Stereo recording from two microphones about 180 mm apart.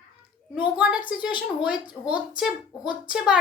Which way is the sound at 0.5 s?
10° right (ahead or behind).